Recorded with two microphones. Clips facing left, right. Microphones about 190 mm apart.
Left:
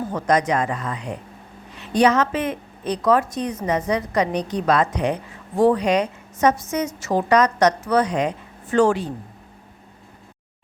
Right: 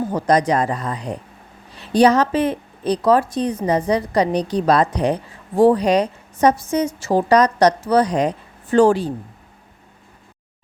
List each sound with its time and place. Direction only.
0.1 s a woman's voice: 35° right (ahead or behind)